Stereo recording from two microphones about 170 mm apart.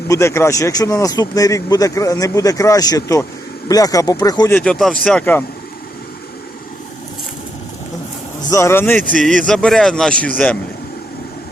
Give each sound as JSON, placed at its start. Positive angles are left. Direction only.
{"t": 0.1, "sound": "speech", "side_deg": 15}
{"t": 4.5, "sound": "speech", "side_deg": 5}
{"t": 8.4, "sound": "speech", "side_deg": 15}
{"t": 9.0, "sound": "speech", "side_deg": 5}